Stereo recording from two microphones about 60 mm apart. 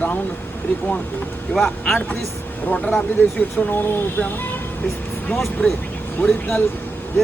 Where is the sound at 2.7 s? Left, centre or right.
Centre.